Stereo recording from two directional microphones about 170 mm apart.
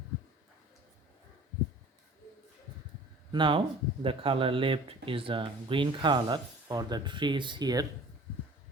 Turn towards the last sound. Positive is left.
turn(degrees=-20)  # may be behind; listen again after turning